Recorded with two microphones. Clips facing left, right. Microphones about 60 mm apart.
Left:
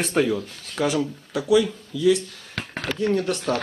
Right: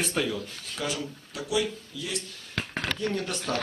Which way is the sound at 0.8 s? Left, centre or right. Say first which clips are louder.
Left 9 dB; left.